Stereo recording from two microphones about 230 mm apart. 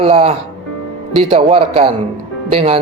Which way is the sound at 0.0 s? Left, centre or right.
Right.